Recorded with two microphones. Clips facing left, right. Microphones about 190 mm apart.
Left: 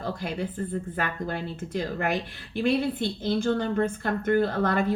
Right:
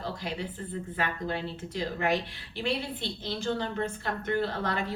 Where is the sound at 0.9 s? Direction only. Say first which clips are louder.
Right 2 dB; 50° left (ahead or behind).